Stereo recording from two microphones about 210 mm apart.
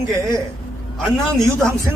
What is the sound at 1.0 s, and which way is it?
Speech, centre (ahead or behind).